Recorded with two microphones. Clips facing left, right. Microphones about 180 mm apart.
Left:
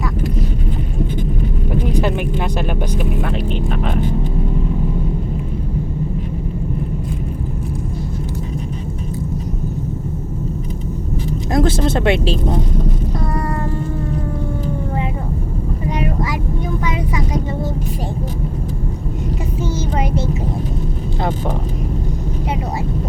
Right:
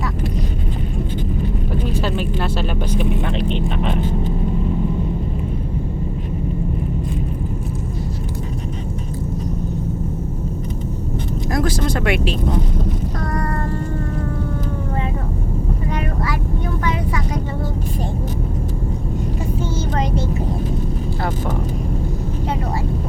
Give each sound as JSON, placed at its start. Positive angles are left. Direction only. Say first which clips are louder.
{"t": 1.8, "sound": "vehicle", "louder": "left 4 dB", "side_deg": 15}
{"t": 11.5, "sound": "vehicle", "louder": "left 4 dB", "side_deg": 25}
{"t": 15.9, "sound": "vehicle", "louder": "left 4 dB", "side_deg": 15}